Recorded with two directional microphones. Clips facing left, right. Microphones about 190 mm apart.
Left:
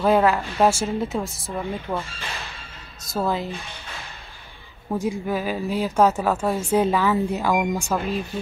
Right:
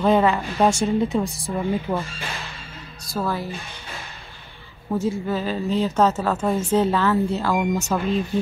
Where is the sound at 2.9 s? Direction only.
20° left (ahead or behind).